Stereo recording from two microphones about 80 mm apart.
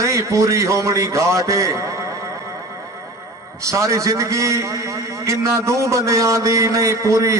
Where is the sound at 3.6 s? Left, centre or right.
Right.